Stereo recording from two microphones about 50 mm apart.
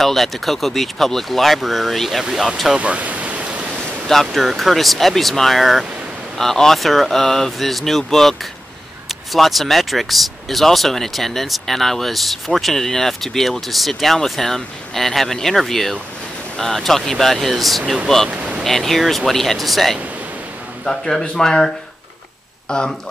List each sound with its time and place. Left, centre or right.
0.0 s speech: centre
2.8 s pink noise: right
4.1 s speech: centre
18.3 s a sound: right
18.6 s speech: centre